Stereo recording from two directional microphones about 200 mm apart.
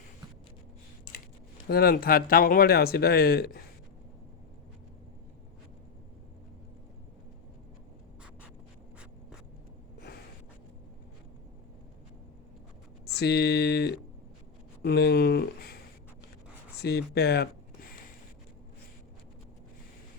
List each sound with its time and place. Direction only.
1.6 s speech: 50° left (ahead or behind)
13.1 s speech: 55° left (ahead or behind)
16.8 s speech: 55° left (ahead or behind)